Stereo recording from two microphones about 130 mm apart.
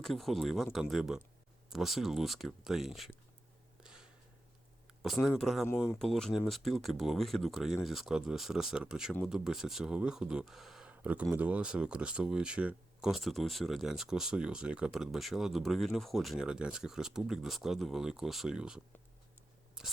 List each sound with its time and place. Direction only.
0.0 s speech: centre (ahead or behind)
5.4 s speech: centre (ahead or behind)
19.8 s rub: 5° right (ahead or behind)